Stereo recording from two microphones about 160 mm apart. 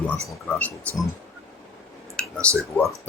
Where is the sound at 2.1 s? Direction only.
5° left (ahead or behind).